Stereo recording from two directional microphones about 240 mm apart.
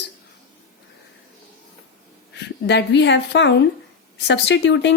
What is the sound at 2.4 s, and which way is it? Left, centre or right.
Speech, left.